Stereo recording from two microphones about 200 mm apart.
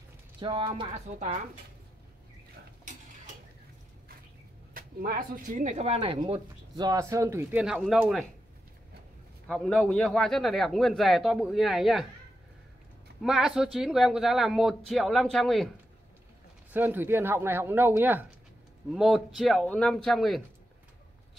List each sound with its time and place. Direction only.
0.4 s speech: 25° right (ahead or behind)
4.7 s speech: 45° right (ahead or behind); by 8.3 s centre (ahead or behind)
9.5 s a man's voice: 5° left (ahead or behind)
13.2 s a man's voice: centre (ahead or behind)
16.7 s a man's voice: 10° right (ahead or behind)